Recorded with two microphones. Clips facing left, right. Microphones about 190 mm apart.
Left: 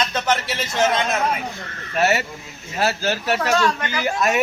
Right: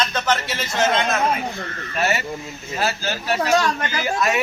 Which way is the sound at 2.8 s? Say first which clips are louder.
Left 3 dB; 70° left (ahead or behind).